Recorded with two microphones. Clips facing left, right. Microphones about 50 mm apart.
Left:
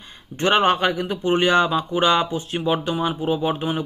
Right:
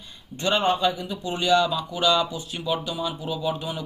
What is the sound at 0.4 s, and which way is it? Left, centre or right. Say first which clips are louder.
A man's voice: left 4 dB; left.